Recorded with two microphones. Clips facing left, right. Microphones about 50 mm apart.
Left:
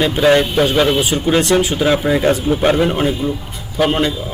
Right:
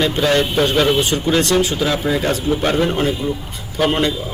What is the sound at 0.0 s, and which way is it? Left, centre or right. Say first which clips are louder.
Speech: left 4 dB; centre.